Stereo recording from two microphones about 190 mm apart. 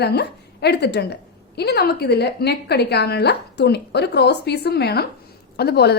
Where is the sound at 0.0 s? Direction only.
60° left (ahead or behind).